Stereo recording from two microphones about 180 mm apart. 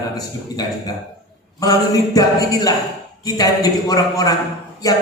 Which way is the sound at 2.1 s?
20° left (ahead or behind).